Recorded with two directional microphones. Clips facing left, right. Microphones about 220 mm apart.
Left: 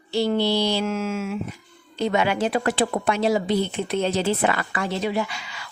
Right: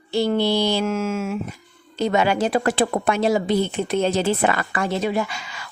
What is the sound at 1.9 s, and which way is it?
Speech, 40° right (ahead or behind).